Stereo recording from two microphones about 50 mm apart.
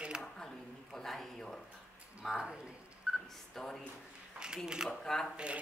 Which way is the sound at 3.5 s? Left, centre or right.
Centre.